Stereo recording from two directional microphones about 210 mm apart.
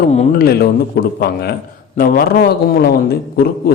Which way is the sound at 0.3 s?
45° left (ahead or behind).